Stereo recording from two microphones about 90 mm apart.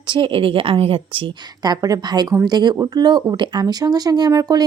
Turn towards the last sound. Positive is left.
turn(degrees=-45)  # may be behind; listen again after turning